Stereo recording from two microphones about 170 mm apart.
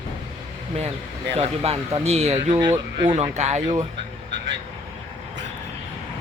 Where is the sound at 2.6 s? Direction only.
20° right (ahead or behind).